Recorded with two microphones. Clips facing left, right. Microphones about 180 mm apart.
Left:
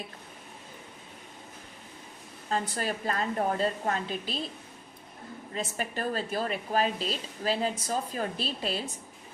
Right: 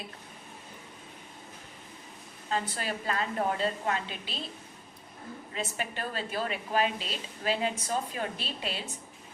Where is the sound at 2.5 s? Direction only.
45° left (ahead or behind).